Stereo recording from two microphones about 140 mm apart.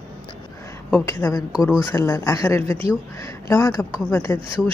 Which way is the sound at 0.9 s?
20° left (ahead or behind).